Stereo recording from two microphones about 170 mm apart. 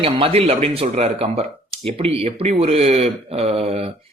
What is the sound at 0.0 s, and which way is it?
A man's voice, 35° right (ahead or behind).